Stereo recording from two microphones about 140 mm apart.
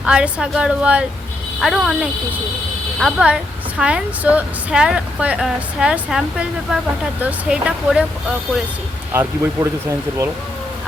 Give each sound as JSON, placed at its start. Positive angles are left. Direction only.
{"t": 0.0, "sound": "a woman's voice", "side_deg": -5}
{"t": 9.1, "sound": "speech", "side_deg": -20}